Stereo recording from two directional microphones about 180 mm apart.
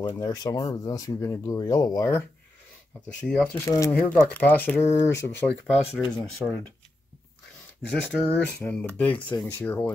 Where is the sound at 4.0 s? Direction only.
5° left (ahead or behind).